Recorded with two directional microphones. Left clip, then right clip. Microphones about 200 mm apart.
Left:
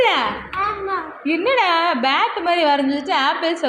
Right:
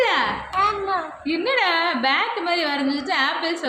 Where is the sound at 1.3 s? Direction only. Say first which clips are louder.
Left 4 dB; 15° left (ahead or behind).